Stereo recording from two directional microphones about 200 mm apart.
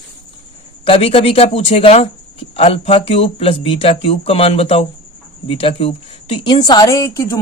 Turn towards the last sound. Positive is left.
turn(degrees=15)  # may be behind; listen again after turning